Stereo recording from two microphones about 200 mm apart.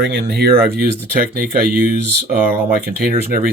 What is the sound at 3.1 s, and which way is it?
Speech, 45° right (ahead or behind).